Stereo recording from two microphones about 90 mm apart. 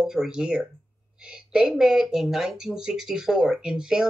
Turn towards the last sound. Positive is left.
turn(degrees=-10)  # may be behind; listen again after turning